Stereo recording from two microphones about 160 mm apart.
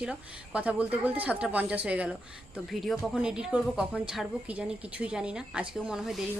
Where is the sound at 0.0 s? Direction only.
5° right (ahead or behind).